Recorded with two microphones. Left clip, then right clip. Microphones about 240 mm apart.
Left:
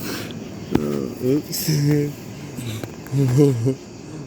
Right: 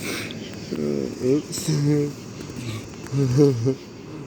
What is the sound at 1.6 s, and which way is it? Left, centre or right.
Speech, centre.